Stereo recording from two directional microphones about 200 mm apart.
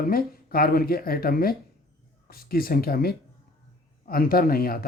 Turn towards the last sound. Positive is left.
turn(degrees=50)  # may be behind; listen again after turning